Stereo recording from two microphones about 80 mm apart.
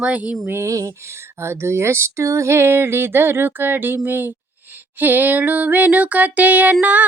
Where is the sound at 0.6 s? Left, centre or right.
Right.